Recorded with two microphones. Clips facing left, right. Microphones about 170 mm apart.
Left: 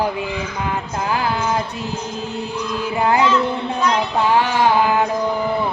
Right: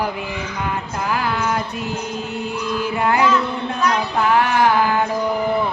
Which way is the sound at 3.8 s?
25° left (ahead or behind).